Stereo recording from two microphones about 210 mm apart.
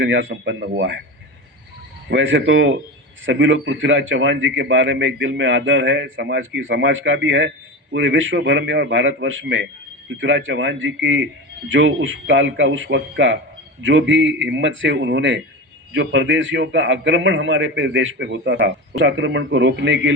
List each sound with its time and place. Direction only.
0.0 s a man's voice: 60° right (ahead or behind)
2.0 s a man's voice: 60° right (ahead or behind)